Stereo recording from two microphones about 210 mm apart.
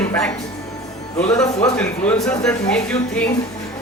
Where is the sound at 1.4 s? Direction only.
5° left (ahead or behind).